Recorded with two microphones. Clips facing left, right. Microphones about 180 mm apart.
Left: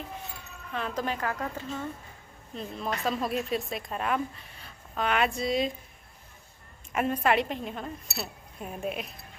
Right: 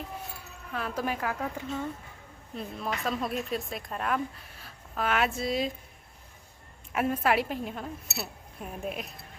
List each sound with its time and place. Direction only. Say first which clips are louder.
0.7 s a woman's voice: even; 5° right (ahead or behind)
6.9 s speech: left 1 dB; 5° right (ahead or behind)